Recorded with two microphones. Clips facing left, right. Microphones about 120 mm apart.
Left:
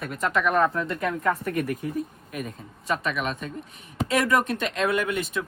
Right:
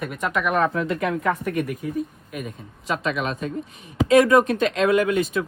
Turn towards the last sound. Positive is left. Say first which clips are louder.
# right 6 dB
turn(degrees=0)  # may be behind; listen again after turning